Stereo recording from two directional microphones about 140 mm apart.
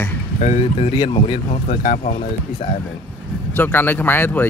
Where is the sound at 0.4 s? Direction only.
55° left (ahead or behind).